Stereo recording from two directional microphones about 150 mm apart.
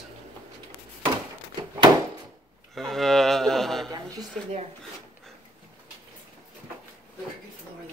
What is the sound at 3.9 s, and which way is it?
Speech, 25° right (ahead or behind).